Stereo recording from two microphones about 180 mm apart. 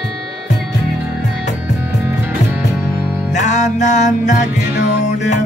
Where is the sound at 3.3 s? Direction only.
40° left (ahead or behind).